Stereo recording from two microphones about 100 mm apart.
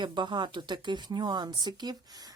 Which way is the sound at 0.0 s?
50° right (ahead or behind).